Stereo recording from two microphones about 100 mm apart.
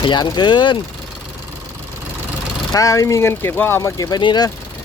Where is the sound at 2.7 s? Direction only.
35° left (ahead or behind).